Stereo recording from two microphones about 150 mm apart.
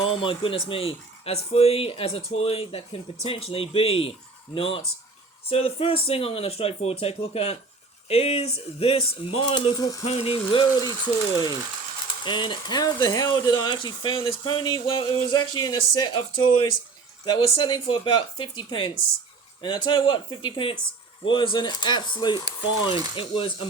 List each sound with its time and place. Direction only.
0.0 s speech: 35° left (ahead or behind)
10.0 s speech: 45° left (ahead or behind)
12.2 s speech: 30° left (ahead or behind)